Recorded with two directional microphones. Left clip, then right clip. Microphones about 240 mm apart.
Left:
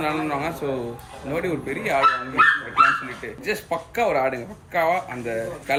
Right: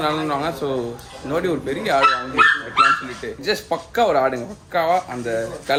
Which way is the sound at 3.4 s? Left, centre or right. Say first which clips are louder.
Right 4 dB; centre.